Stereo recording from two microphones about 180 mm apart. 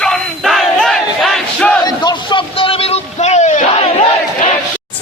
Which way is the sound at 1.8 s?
25° left (ahead or behind).